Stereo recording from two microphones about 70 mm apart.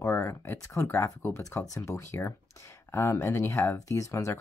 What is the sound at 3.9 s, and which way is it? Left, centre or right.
Speech, left.